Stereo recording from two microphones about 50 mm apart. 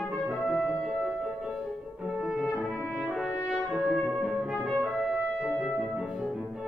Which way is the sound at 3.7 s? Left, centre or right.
Centre.